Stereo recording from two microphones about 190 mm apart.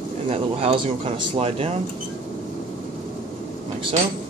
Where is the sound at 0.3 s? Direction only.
30° right (ahead or behind).